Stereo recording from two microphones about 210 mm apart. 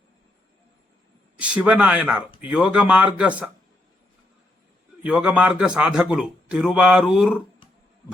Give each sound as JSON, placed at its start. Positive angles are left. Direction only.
{"t": 1.4, "sound": "a man's voice", "side_deg": -5}
{"t": 5.0, "sound": "a man's voice", "side_deg": -5}